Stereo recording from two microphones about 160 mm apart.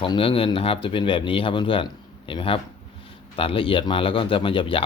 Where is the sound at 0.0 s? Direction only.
35° left (ahead or behind).